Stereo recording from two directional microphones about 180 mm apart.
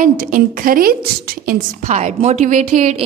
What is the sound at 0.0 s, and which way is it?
A woman's voice, 50° right (ahead or behind).